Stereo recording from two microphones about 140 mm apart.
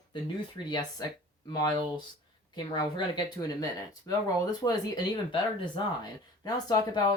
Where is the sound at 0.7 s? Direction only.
30° left (ahead or behind).